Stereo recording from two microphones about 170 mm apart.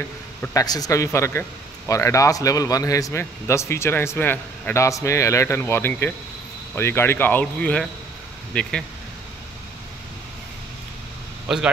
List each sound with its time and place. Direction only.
0.4 s a man's voice: 15° left (ahead or behind)
11.4 s speech: 5° right (ahead or behind)